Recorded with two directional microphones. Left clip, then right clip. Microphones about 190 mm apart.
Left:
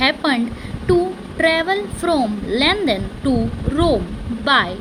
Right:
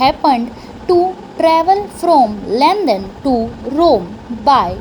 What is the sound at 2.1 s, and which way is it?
A child's voice, 15° right (ahead or behind).